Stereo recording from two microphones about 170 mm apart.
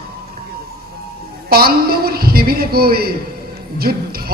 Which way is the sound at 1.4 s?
65° right (ahead or behind).